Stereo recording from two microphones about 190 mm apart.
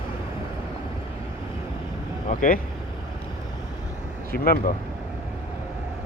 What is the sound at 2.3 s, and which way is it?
Speech, 45° left (ahead or behind).